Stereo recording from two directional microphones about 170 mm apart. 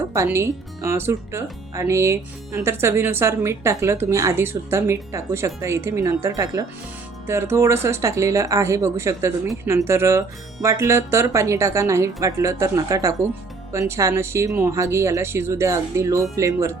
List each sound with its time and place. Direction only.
0.1 s speech: 15° right (ahead or behind)